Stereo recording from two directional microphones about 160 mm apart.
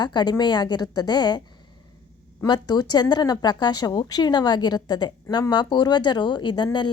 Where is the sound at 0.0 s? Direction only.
25° left (ahead or behind).